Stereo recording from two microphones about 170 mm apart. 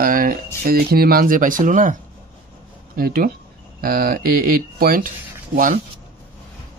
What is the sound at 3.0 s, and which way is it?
Speech, 65° right (ahead or behind).